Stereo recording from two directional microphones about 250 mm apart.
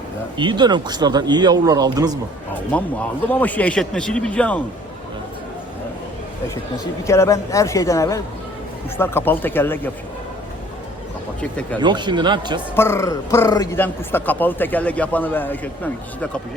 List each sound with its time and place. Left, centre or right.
0.3 s speech: centre
2.7 s a man's voice: centre
7.1 s a man's voice: centre
11.3 s a man's voice: centre
11.8 s speech: centre
12.7 s a man's voice: centre